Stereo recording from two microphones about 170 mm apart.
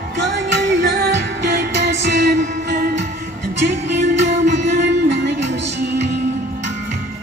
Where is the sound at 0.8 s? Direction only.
80° right.